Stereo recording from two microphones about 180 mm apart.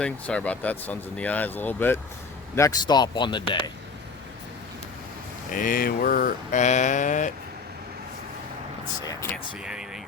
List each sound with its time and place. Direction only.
0.0 s speech: 5° left (ahead or behind); by 3.6 s 25° left (ahead or behind)
5.5 s mantra: 50° left (ahead or behind)
9.6 s speech: 5° right (ahead or behind)